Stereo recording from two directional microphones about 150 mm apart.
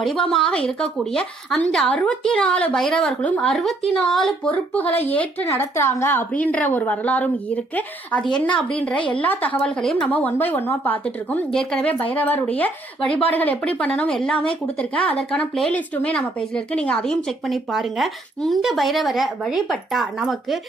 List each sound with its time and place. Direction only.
0.0 s speech: centre (ahead or behind)